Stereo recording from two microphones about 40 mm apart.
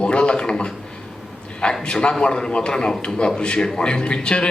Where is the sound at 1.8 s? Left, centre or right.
Left.